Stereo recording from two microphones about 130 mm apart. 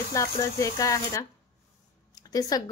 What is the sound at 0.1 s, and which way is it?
A woman's voice, 25° left (ahead or behind).